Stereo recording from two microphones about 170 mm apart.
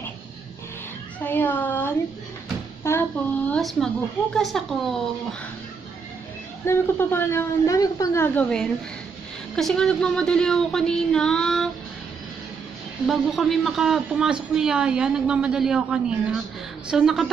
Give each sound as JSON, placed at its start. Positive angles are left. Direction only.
{"t": 1.2, "sound": "speech", "side_deg": 10}
{"t": 2.8, "sound": "a sound", "side_deg": 15}
{"t": 3.5, "sound": "a woman's voice", "side_deg": 5}
{"t": 6.6, "sound": "a woman's voice", "side_deg": 15}
{"t": 13.0, "sound": "a woman's voice", "side_deg": 0}